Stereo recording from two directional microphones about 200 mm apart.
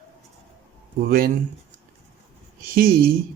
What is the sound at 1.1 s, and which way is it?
Speech, 50° right (ahead or behind).